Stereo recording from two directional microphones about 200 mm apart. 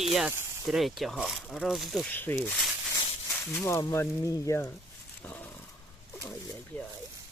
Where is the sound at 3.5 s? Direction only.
15° left (ahead or behind).